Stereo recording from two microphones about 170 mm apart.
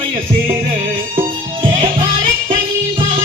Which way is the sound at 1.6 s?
30° right (ahead or behind).